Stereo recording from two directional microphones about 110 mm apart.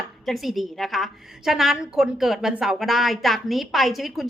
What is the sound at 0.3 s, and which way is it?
A woman's voice, centre (ahead or behind).